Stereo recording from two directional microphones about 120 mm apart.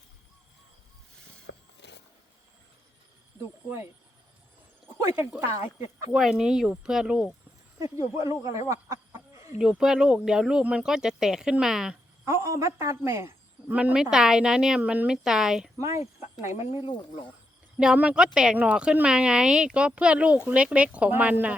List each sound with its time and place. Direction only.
4.9 s a sound: 25° right (ahead or behind)
6.1 s speech: 5° right (ahead or behind)
7.9 s speech: 25° right (ahead or behind)
8.6 s chicken: 25° right (ahead or behind)
9.6 s speech: 5° right (ahead or behind)
12.2 s speech: 25° right (ahead or behind)
13.7 s speech: 10° right (ahead or behind)
15.8 s speech: 25° right (ahead or behind)
17.7 s speech: 10° right (ahead or behind)